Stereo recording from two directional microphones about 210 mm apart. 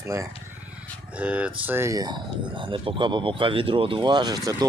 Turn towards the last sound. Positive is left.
turn(degrees=-20)  # may be behind; listen again after turning